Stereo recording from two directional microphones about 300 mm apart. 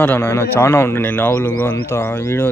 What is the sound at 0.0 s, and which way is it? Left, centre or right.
A man's voice, centre.